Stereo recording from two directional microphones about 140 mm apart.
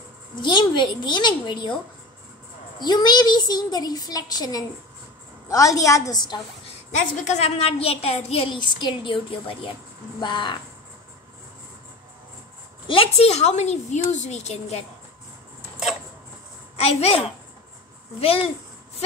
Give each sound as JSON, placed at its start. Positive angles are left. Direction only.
{"t": 0.4, "sound": "a child's voice", "side_deg": 35}
{"t": 2.8, "sound": "a woman's voice", "side_deg": 30}
{"t": 6.9, "sound": "a woman's voice", "side_deg": 60}
{"t": 12.8, "sound": "a woman's voice", "side_deg": 40}
{"t": 16.7, "sound": "a woman's voice", "side_deg": 45}